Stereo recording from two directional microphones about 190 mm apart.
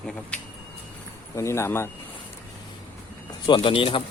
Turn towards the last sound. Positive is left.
turn(degrees=25)  # may be behind; listen again after turning